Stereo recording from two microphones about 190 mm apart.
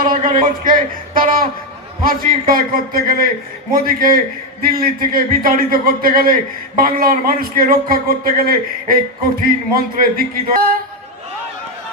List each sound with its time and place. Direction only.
0.0 s a man's voice: 45° right (ahead or behind)